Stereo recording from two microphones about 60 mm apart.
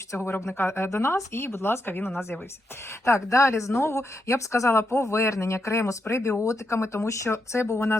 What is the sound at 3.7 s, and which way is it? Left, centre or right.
Speech, left.